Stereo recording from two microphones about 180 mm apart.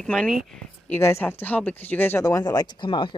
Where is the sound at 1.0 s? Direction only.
15° left (ahead or behind).